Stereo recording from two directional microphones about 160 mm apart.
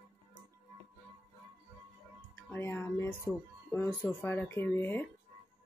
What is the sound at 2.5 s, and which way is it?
Speech, 15° left (ahead or behind).